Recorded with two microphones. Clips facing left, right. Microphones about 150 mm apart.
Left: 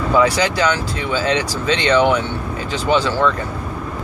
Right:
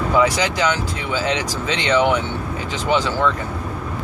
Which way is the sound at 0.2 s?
15° right (ahead or behind).